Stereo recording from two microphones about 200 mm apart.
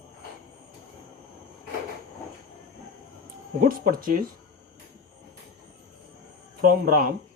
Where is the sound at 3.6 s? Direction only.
45° right (ahead or behind).